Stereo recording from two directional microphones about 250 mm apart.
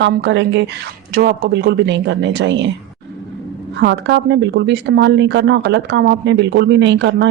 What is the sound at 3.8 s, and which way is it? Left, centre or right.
Speech, right.